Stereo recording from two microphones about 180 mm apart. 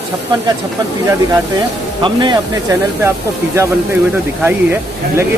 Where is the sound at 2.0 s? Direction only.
25° right (ahead or behind).